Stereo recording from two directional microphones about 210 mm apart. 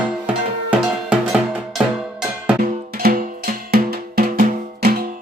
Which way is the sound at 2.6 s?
45° right (ahead or behind).